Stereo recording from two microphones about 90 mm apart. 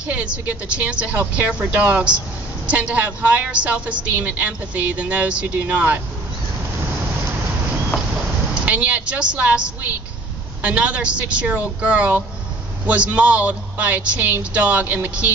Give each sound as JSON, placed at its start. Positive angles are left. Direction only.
{"t": 0.0, "sound": "speech", "side_deg": -15}
{"t": 7.9, "sound": "a sound", "side_deg": 10}
{"t": 8.6, "sound": "speech", "side_deg": -15}